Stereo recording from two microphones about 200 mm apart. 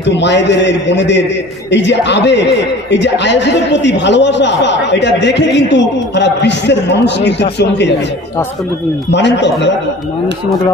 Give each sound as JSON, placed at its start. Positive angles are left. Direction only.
{"t": 0.0, "sound": "a woman's voice", "side_deg": 60}
{"t": 9.1, "sound": "a woman's voice", "side_deg": 60}